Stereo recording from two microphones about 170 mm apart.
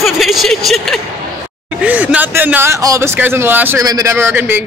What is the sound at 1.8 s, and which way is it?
Speech, 10° right (ahead or behind).